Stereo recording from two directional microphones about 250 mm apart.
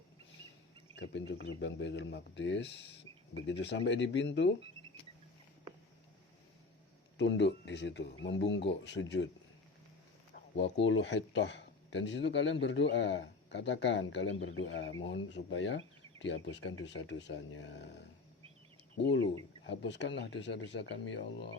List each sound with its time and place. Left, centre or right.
0.9 s speech: left
7.2 s speech: left
10.5 s speech: left
19.6 s speech: left